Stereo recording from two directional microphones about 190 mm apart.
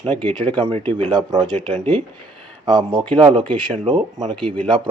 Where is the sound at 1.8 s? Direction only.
10° left (ahead or behind).